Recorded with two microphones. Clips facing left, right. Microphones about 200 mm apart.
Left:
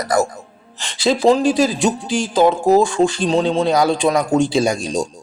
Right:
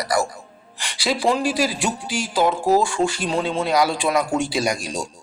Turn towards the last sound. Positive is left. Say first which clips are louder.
# left 6 dB
turn(degrees=25)  # may be behind; listen again after turning